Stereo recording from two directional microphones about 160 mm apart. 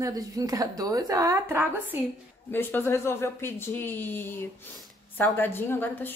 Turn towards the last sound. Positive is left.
turn(degrees=15)  # may be behind; listen again after turning